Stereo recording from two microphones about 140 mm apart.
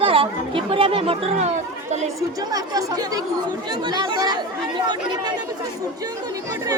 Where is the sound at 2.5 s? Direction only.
25° right (ahead or behind).